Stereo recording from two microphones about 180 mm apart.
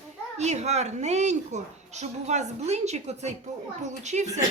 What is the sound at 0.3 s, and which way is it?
A woman's voice, 40° right (ahead or behind).